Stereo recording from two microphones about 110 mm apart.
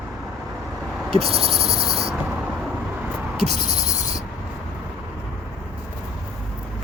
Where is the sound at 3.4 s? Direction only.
80° right.